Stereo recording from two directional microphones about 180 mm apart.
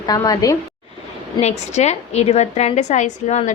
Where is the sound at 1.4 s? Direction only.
40° left (ahead or behind).